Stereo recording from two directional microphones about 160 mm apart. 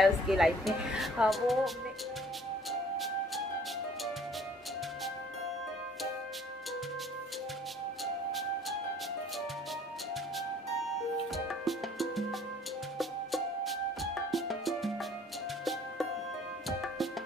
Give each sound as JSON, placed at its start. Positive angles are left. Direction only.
{"t": 0.0, "sound": "speech", "side_deg": 0}
{"t": 8.0, "sound": "music", "side_deg": 0}
{"t": 11.3, "sound": "music", "side_deg": 0}